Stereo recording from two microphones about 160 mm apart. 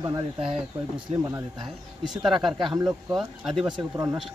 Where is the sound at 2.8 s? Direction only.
20° right (ahead or behind).